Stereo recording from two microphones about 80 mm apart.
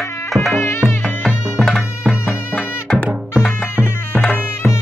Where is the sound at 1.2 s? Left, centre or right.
Centre.